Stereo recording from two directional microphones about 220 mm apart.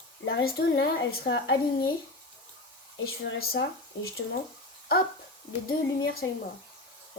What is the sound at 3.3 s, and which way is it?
Speech, 50° left (ahead or behind).